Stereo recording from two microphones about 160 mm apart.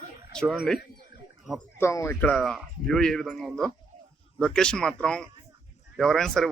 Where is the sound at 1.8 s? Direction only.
15° left (ahead or behind).